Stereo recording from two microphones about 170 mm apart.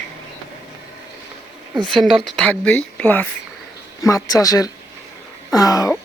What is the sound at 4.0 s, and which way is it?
Speech, 20° left (ahead or behind).